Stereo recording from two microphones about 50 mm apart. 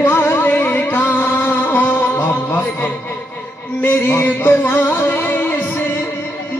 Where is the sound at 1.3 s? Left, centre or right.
Left.